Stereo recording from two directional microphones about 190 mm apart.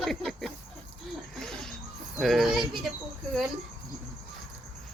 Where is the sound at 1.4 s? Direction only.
5° left (ahead or behind).